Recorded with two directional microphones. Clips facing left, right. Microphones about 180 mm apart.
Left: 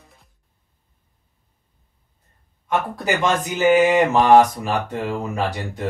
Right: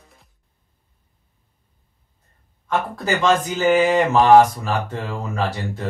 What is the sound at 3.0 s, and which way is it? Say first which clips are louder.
Speech: right 4 dB; 15° left (ahead or behind).